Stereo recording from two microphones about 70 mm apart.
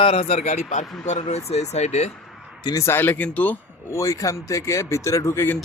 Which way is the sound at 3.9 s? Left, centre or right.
Left.